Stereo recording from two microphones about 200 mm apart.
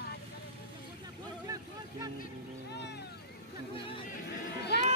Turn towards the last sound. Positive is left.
turn(degrees=55)  # may be behind; listen again after turning